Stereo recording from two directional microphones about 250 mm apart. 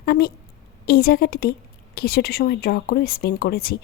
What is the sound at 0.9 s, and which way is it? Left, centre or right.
Speech, left.